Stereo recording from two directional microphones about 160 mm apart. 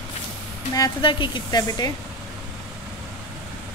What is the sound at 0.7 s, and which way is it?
Speech, 25° left (ahead or behind).